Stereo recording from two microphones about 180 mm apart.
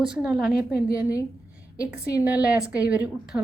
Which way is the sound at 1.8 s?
20° left (ahead or behind).